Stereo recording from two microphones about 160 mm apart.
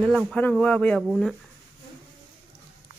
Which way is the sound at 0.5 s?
5° left (ahead or behind).